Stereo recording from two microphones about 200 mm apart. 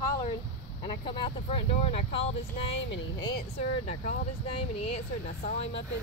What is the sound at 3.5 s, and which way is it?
Speech, 35° left (ahead or behind).